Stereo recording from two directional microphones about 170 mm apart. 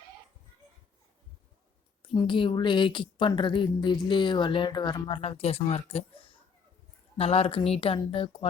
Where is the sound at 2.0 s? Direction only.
30° left (ahead or behind).